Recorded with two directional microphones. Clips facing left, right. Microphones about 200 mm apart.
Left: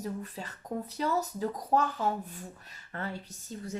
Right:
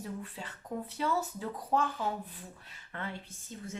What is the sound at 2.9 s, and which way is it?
Speech, 40° left (ahead or behind).